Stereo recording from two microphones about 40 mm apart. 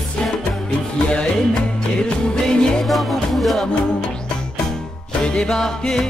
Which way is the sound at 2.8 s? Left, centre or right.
Centre.